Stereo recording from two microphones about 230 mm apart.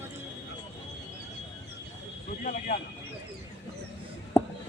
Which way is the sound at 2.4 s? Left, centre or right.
Left.